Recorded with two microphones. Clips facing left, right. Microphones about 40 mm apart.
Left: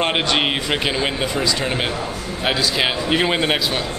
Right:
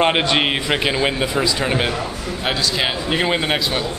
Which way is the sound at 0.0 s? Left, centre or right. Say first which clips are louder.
Right 2 dB; centre.